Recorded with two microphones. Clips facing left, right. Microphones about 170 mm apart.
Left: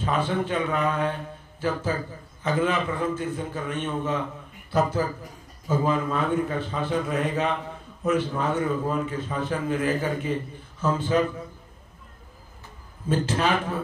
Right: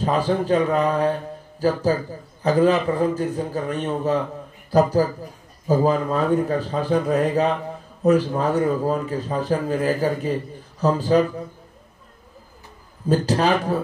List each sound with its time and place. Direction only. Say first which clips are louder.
0.0 s speech: right 5 dB; 35° right (ahead or behind)
13.1 s speech: right 5 dB; 40° right (ahead or behind)